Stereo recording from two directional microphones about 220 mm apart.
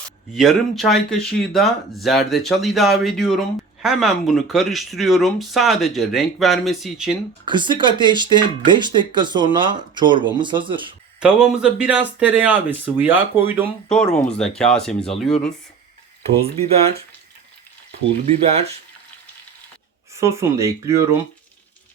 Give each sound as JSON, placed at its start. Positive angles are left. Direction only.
{"t": 0.3, "sound": "speech", "side_deg": 0}
{"t": 7.4, "sound": "speech", "side_deg": -20}
{"t": 11.2, "sound": "speech", "side_deg": -5}
{"t": 14.2, "sound": "speech", "side_deg": 5}
{"t": 16.2, "sound": "speech", "side_deg": -30}
{"t": 18.3, "sound": "speech", "side_deg": -30}
{"t": 20.1, "sound": "speech", "side_deg": -15}